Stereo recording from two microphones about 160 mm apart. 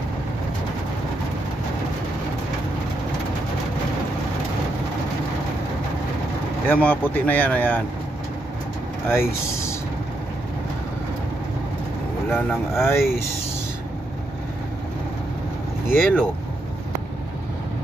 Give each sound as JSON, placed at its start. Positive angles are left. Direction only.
{"t": 6.7, "sound": "speech", "side_deg": 10}
{"t": 9.1, "sound": "speech", "side_deg": 15}
{"t": 12.3, "sound": "speech", "side_deg": 10}
{"t": 15.9, "sound": "speech", "side_deg": 10}